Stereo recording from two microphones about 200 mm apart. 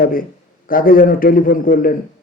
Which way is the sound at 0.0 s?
45° left (ahead or behind).